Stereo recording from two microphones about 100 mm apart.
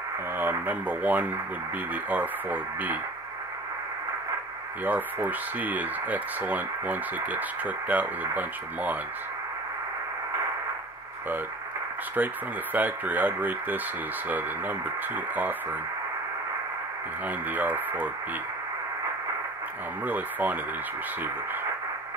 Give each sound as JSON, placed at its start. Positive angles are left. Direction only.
{"t": 0.4, "sound": "speech", "side_deg": -20}
{"t": 4.8, "sound": "speech", "side_deg": -15}
{"t": 12.2, "sound": "speech", "side_deg": -15}
{"t": 17.3, "sound": "speech", "side_deg": -15}
{"t": 20.1, "sound": "speech", "side_deg": -15}